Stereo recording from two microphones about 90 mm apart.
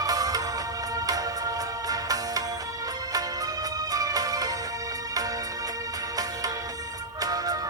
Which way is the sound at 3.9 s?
45° right (ahead or behind).